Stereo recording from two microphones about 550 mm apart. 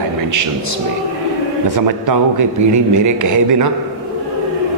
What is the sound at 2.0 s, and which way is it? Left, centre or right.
A man's voice, right.